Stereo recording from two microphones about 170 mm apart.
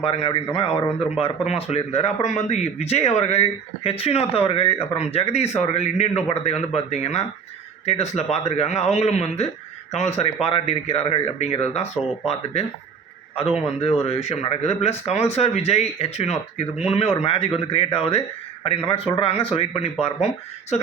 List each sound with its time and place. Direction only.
0.0 s speech: 35° left (ahead or behind)